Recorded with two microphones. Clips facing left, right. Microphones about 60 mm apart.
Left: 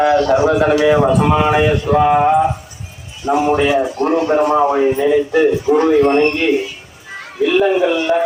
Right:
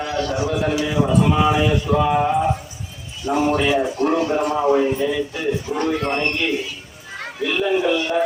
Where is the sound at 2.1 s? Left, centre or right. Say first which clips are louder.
Left 6 dB; left.